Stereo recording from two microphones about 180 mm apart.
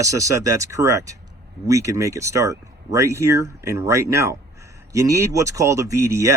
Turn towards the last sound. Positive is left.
turn(degrees=-15)  # may be behind; listen again after turning